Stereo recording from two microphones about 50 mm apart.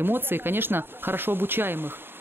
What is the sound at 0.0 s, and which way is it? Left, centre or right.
Speech, right.